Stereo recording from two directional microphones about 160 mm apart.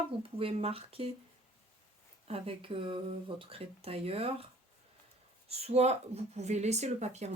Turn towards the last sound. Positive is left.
turn(degrees=-45)  # may be behind; listen again after turning